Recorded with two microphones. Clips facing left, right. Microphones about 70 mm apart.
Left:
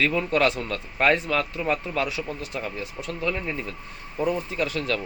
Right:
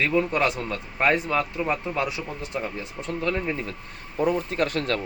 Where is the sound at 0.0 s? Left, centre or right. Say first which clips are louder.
Even; right.